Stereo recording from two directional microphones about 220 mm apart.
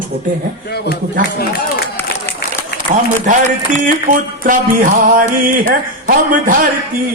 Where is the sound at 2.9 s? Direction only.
35° right (ahead or behind).